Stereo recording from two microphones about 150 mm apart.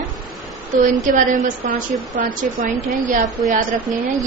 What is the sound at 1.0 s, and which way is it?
A woman's voice, 60° right (ahead or behind).